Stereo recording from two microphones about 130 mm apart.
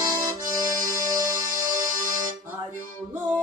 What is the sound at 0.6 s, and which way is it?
Music, 25° right (ahead or behind).